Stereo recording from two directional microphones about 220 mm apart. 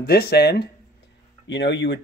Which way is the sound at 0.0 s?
45° left (ahead or behind).